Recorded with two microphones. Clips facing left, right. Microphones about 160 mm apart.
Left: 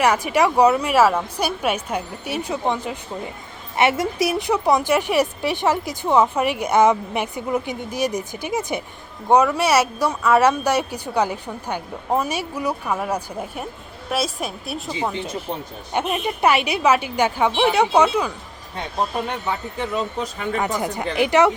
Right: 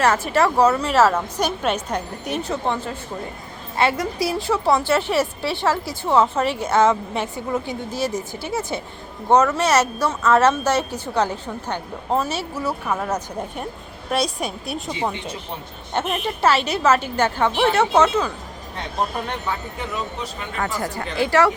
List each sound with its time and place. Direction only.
0.0 s a woman's voice: 15° left (ahead or behind)
20.6 s speech: 20° left (ahead or behind)